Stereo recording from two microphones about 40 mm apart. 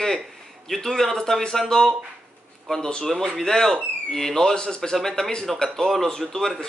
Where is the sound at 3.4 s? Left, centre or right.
Centre.